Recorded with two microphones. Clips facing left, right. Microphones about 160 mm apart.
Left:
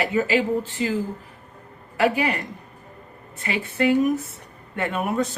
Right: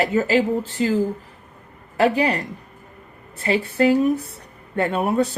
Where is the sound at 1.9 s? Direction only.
35° right (ahead or behind).